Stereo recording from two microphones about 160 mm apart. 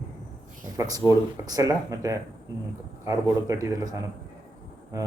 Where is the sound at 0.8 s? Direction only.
25° right (ahead or behind).